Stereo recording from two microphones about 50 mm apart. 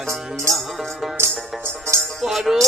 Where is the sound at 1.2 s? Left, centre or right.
Right.